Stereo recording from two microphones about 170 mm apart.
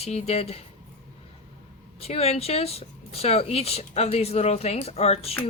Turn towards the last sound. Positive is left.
turn(degrees=35)  # may be behind; listen again after turning